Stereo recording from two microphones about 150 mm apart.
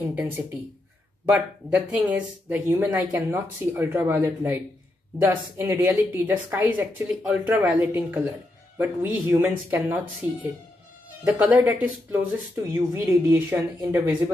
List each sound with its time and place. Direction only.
1.3 s speech: 10° right (ahead or behind)